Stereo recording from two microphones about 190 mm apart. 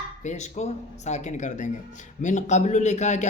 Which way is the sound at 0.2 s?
35° left (ahead or behind).